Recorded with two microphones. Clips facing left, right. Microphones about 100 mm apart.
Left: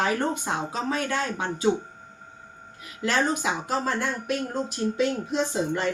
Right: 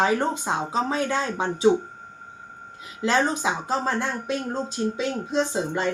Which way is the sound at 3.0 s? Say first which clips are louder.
Right 2 dB; 25° right (ahead or behind).